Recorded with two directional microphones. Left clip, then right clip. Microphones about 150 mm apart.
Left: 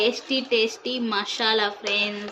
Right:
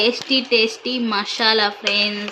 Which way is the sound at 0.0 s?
30° right (ahead or behind).